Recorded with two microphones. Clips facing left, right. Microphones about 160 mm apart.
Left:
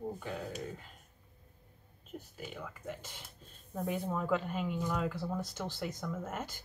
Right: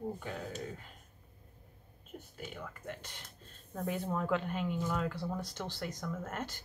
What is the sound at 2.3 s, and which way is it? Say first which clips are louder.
Speech: right 1 dB; centre (ahead or behind).